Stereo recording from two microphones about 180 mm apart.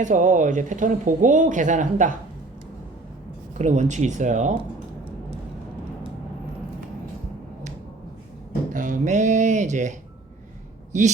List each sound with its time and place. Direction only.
0.0 s speech: 45° right (ahead or behind)
3.6 s speech: 40° right (ahead or behind)
8.7 s a sound: 45° right (ahead or behind)
10.9 s speech: 40° right (ahead or behind)